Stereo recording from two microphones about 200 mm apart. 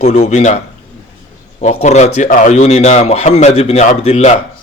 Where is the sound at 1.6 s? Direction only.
35° left (ahead or behind).